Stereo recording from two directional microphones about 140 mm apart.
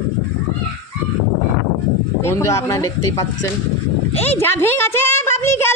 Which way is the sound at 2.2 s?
20° left (ahead or behind).